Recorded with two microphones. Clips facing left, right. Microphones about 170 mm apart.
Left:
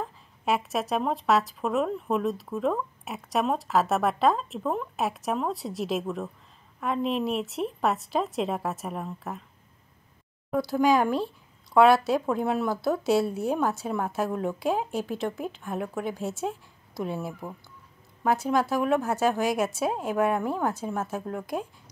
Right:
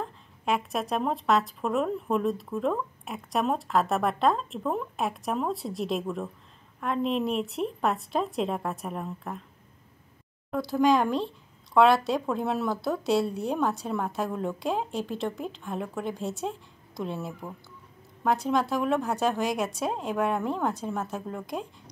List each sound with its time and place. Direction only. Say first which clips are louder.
0.0 s speech: left 1 dB; 5° left (ahead or behind)
10.5 s speech: left 1 dB; 5° left (ahead or behind)